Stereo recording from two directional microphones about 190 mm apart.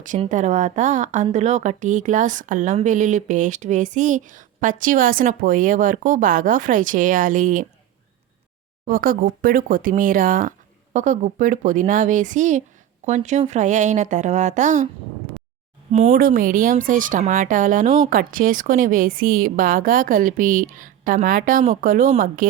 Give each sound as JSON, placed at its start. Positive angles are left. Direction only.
{"t": 0.3, "sound": "speech", "side_deg": -40}
{"t": 8.9, "sound": "a woman's voice", "side_deg": -50}
{"t": 15.9, "sound": "speech", "side_deg": -35}
{"t": 16.1, "sound": "a woman's voice", "side_deg": -50}